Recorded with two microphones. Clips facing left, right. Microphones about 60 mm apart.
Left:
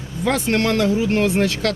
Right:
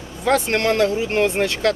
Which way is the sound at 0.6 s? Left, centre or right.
Right.